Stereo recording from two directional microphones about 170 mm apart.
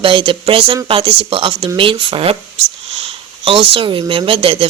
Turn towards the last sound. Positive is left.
turn(degrees=-35)  # may be behind; listen again after turning